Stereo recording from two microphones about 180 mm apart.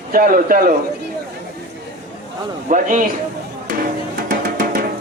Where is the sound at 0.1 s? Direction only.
50° right (ahead or behind).